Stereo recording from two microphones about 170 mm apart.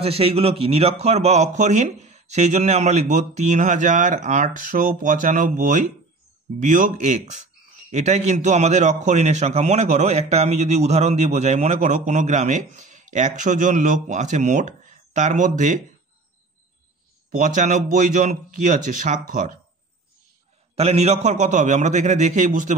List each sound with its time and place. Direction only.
0.0 s a man's voice: 35° right (ahead or behind)
17.4 s a man's voice: 45° right (ahead or behind)
20.7 s a man's voice: 40° right (ahead or behind)